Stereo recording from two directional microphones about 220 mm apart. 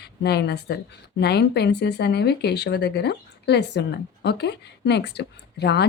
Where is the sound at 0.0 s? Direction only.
50° left (ahead or behind).